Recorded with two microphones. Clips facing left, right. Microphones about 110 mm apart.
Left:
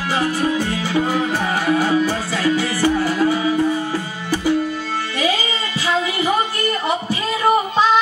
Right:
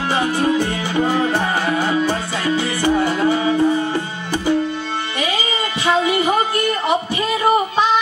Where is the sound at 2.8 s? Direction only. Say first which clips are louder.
Right 3 dB; 25° right (ahead or behind).